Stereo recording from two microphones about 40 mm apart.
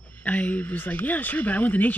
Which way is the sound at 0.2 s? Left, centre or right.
Left.